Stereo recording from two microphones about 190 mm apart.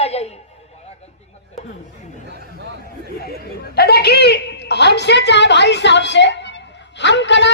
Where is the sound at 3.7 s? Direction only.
55° left (ahead or behind).